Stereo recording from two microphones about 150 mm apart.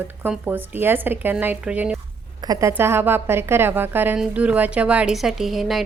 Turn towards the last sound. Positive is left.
turn(degrees=0)  # may be behind; listen again after turning